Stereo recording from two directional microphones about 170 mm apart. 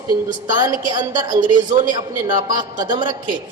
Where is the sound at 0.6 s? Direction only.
25° right (ahead or behind).